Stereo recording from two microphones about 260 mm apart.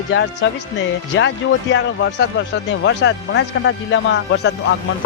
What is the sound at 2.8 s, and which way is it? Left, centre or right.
Speech, left.